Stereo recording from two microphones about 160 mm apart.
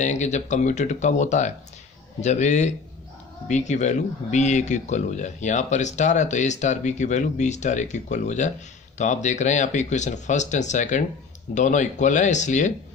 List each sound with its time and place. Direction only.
0.0 s speech: 50° left (ahead or behind)